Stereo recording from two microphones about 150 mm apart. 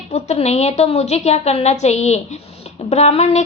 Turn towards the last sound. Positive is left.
turn(degrees=45)  # may be behind; listen again after turning